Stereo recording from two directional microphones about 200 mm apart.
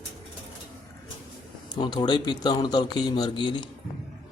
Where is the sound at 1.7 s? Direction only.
20° left (ahead or behind).